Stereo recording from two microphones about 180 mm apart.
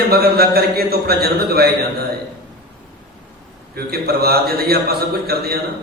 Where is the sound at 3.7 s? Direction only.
60° right (ahead or behind).